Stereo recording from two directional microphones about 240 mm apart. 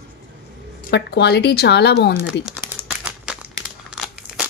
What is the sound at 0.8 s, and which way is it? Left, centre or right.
Speech, left.